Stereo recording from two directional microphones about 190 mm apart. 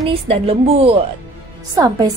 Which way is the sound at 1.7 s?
20° right (ahead or behind).